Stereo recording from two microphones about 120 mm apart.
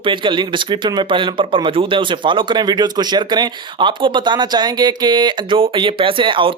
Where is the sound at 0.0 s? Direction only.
45° right (ahead or behind).